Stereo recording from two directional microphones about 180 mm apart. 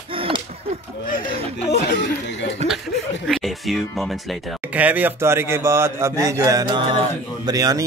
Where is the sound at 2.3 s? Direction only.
75° left (ahead or behind).